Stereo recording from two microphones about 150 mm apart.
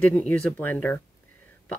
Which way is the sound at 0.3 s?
10° left (ahead or behind).